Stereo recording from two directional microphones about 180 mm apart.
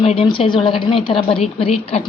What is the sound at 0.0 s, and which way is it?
A woman's voice, 30° left (ahead or behind).